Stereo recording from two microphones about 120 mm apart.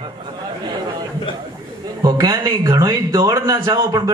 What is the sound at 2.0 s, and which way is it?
A man's voice, 35° right (ahead or behind).